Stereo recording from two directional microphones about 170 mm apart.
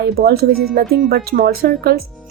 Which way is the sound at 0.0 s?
65° right (ahead or behind).